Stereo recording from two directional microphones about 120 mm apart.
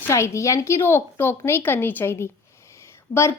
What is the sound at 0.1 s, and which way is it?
A woman's voice, 25° left (ahead or behind).